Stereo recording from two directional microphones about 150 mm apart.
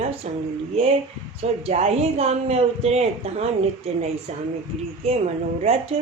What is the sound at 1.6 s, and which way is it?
Speech, 45° right (ahead or behind).